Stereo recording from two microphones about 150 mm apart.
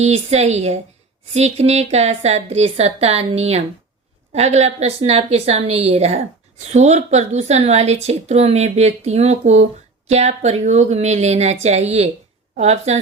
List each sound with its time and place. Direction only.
0.0 s a woman's voice: 45° right (ahead or behind)